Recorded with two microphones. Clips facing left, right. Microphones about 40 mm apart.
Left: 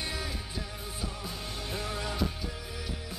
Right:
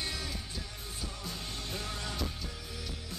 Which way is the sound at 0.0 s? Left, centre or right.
Centre.